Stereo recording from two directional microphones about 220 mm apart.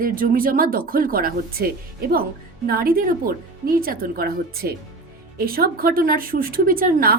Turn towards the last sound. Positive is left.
turn(degrees=-40)  # may be behind; listen again after turning